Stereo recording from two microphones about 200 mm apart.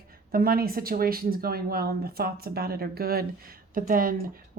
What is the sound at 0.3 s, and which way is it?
Speech, 45° right (ahead or behind).